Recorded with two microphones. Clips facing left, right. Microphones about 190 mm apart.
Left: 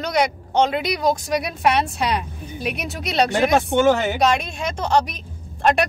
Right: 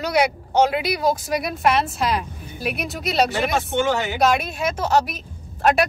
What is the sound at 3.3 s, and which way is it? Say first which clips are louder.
Speech: left 4 dB; 50° left (ahead or behind).